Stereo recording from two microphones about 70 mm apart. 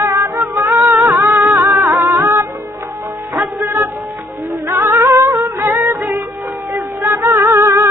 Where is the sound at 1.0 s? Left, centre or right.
Right.